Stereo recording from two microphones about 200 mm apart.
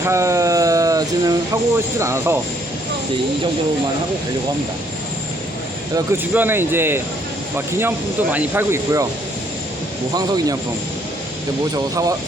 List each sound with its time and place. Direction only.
0.0 s a sound: 15° right (ahead or behind)
2.0 s speech: 15° right (ahead or behind)
6.1 s speech: 10° right (ahead or behind)
10.2 s speech: 20° right (ahead or behind)